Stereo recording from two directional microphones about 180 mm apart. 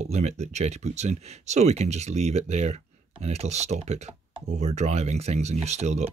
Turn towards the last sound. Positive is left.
turn(degrees=-40)  # may be behind; listen again after turning